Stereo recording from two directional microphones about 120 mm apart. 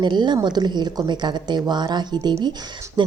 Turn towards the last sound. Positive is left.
turn(degrees=-40)  # may be behind; listen again after turning